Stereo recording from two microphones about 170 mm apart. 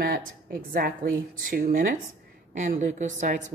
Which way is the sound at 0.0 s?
60° right (ahead or behind).